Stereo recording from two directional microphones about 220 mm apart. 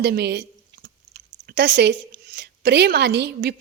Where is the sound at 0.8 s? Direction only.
45° right (ahead or behind).